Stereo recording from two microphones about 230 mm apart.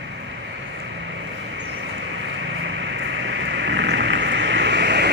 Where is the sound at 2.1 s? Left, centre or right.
Right.